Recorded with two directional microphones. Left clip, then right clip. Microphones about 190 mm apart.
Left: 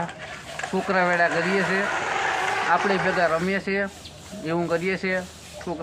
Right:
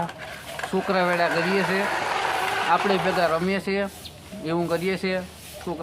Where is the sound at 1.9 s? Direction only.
40° right (ahead or behind).